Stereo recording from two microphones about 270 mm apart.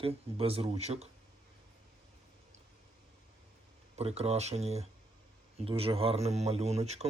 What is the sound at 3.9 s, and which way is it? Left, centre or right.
Speech, right.